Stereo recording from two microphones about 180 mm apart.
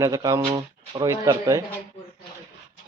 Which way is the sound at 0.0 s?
20° right (ahead or behind).